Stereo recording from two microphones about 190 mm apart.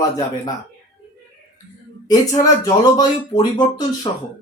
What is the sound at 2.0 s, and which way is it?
Speech, 20° left (ahead or behind).